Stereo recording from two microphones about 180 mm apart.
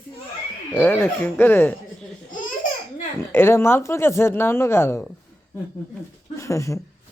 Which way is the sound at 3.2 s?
15° left (ahead or behind).